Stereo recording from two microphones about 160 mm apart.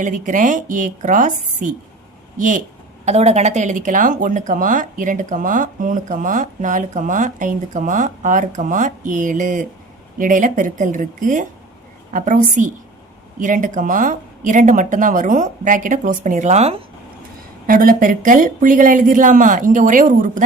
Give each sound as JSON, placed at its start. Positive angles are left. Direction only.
{"t": 0.0, "sound": "speech", "side_deg": -55}
{"t": 3.1, "sound": "speech", "side_deg": -45}
{"t": 17.7, "sound": "speech", "side_deg": -60}